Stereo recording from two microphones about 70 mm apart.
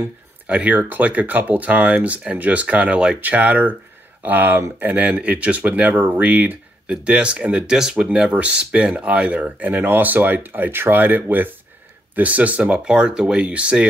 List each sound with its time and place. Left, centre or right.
0.0 s speech: right